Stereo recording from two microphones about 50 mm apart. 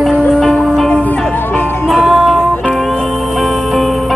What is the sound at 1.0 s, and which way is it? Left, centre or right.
Music, left.